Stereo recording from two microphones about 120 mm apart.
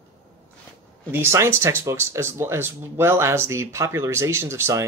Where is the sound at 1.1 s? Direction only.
20° right (ahead or behind).